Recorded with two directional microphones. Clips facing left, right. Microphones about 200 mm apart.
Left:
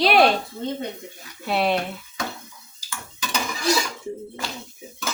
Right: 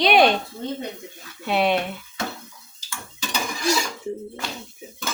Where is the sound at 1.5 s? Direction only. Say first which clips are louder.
Right 1 dB; centre (ahead or behind).